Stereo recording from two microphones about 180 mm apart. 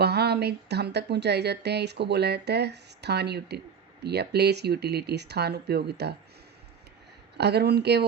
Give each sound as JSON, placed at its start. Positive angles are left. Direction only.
{"t": 0.0, "sound": "speech", "side_deg": -65}
{"t": 7.3, "sound": "speech", "side_deg": -65}